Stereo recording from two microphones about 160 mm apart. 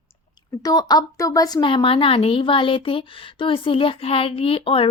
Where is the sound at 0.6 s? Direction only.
25° left (ahead or behind).